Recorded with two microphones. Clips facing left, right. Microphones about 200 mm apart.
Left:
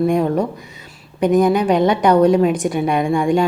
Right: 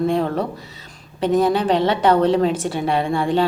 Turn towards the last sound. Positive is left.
turn(degrees=15)  # may be behind; listen again after turning